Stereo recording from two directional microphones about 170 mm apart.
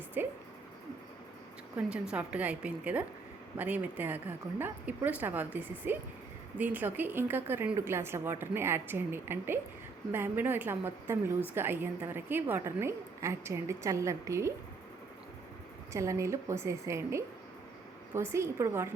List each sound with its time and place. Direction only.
0.2 s a woman's voice: 10° right (ahead or behind)
1.7 s a woman's voice: 5° right (ahead or behind)
15.9 s a woman's voice: 15° right (ahead or behind)